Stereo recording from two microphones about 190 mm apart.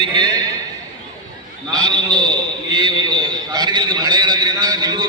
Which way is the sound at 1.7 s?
20° right (ahead or behind).